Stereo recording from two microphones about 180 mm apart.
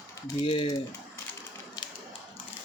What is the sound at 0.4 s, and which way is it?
Speech, 30° left (ahead or behind).